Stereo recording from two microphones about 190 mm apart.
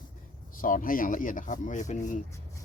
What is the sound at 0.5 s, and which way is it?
Speech, 45° left (ahead or behind).